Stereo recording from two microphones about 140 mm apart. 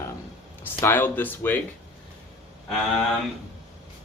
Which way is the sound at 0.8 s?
15° left (ahead or behind).